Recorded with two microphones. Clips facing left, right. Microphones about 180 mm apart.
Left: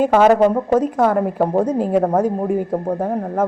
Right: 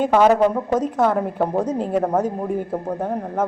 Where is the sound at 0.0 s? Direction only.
10° left (ahead or behind).